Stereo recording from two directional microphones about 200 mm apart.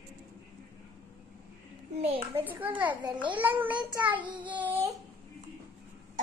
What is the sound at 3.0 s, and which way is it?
Speech, 25° right (ahead or behind).